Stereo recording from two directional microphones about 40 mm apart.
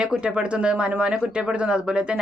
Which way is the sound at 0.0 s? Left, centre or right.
Right.